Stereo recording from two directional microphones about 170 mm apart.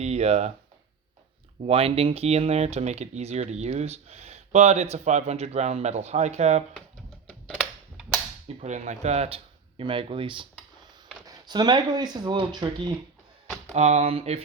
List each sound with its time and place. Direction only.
0.0 s speech: 40° right (ahead or behind)
1.6 s speech: 35° right (ahead or behind)
7.4 s a sound: centre (ahead or behind)
8.6 s speech: 45° right (ahead or behind); by 12.9 s 25° right (ahead or behind)
13.7 s speech: 40° right (ahead or behind)